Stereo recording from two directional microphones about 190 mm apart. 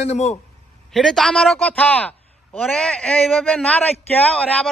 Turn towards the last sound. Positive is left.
turn(degrees=5)  # may be behind; listen again after turning